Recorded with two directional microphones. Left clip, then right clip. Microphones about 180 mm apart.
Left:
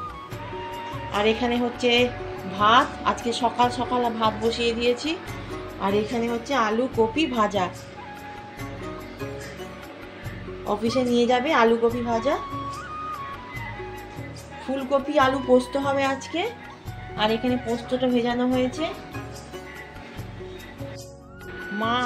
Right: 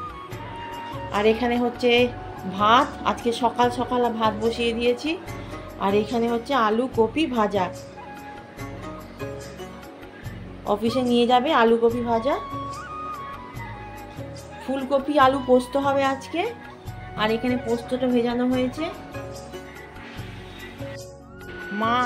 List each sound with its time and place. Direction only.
0.7 s speech: centre (ahead or behind)
10.6 s a woman's voice: centre (ahead or behind)
14.7 s speech: 5° right (ahead or behind)
21.7 s speech: centre (ahead or behind)